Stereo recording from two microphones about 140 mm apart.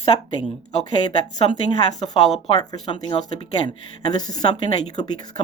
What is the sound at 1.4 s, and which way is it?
Speech, 40° left (ahead or behind).